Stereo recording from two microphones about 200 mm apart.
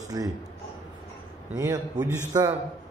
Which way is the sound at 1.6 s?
15° right (ahead or behind).